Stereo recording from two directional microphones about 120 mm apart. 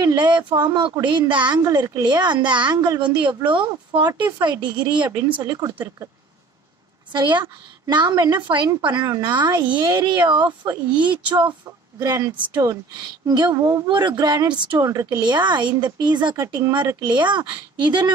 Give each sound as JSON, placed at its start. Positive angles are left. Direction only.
{"t": 0.0, "sound": "speech", "side_deg": -40}
{"t": 7.1, "sound": "speech", "side_deg": -40}
{"t": 15.2, "sound": "speech", "side_deg": -40}